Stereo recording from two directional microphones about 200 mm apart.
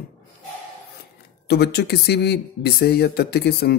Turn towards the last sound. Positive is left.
turn(degrees=50)  # may be behind; listen again after turning